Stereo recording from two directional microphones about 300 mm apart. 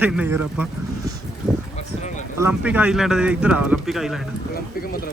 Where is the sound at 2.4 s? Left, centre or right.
Centre.